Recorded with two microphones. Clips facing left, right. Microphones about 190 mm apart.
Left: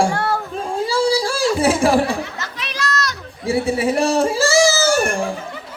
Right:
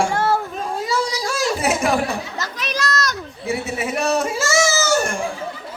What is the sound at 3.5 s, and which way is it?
Speech, 30° left (ahead or behind).